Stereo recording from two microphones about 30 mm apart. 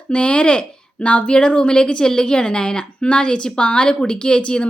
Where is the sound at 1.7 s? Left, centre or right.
Left.